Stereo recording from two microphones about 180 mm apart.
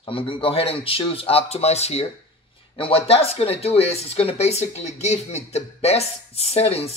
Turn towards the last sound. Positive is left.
turn(degrees=35)  # may be behind; listen again after turning